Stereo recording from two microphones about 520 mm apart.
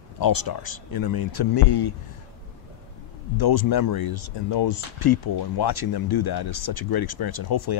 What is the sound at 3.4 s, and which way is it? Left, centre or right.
Speech, left.